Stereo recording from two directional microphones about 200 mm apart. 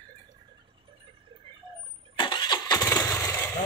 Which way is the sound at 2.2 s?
20° left (ahead or behind).